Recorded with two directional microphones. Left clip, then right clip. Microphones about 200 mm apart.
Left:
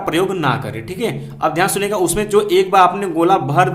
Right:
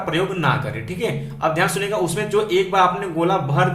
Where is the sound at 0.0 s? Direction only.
35° left (ahead or behind).